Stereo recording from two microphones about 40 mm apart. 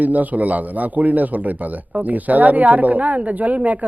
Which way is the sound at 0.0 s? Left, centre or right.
Right.